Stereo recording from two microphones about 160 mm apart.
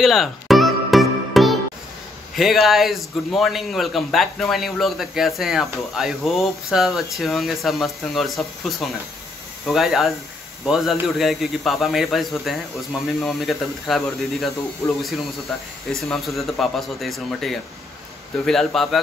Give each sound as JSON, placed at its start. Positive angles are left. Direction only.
{"t": 0.0, "sound": "music", "side_deg": 0}
{"t": 2.3, "sound": "a man's voice", "side_deg": 0}
{"t": 14.8, "sound": "speech", "side_deg": 15}
{"t": 15.9, "sound": "a man's voice", "side_deg": 0}